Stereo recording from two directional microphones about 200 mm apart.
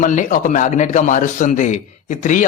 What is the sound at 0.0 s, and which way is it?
A man's voice, 40° left (ahead or behind).